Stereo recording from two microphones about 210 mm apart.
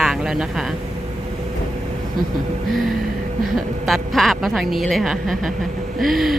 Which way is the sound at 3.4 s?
Centre (ahead or behind).